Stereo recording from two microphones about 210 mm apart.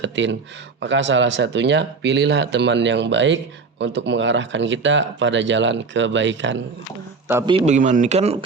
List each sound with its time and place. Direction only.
0.0 s a sound: 60° right (ahead or behind)
0.8 s speech: 60° right (ahead or behind)
7.3 s a man's voice: 10° right (ahead or behind)
7.5 s speech: 35° right (ahead or behind)